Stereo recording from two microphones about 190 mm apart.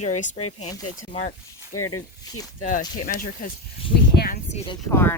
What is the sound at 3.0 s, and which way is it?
Speech, 45° left (ahead or behind).